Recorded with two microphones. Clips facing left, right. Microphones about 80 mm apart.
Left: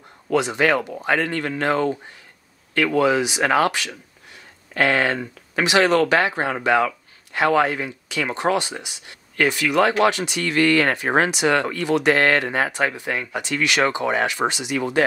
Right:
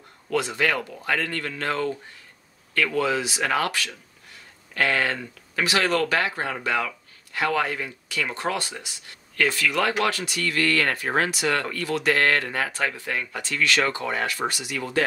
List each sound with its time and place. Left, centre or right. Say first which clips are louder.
0.3 s speech: left 5 dB; left
3.0 s speech: left 8 dB; centre